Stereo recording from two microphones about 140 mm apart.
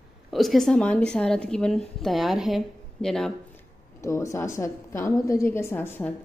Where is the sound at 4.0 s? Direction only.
20° left (ahead or behind).